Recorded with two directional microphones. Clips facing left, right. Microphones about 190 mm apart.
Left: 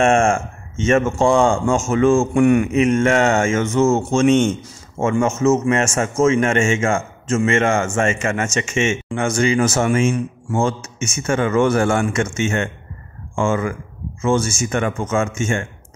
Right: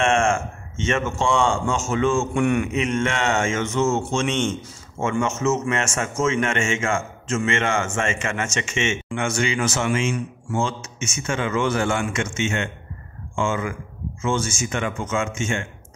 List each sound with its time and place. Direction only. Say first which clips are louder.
0.0 s a man's voice: left 5 dB; 40° left (ahead or behind)